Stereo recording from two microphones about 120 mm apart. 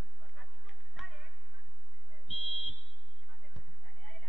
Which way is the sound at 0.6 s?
Centre (ahead or behind).